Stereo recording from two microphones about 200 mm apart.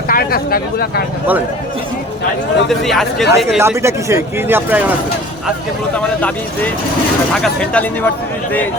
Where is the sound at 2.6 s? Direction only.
Centre (ahead or behind).